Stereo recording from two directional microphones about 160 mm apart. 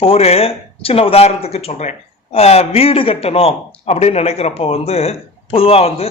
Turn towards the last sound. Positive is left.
turn(degrees=35)  # may be behind; listen again after turning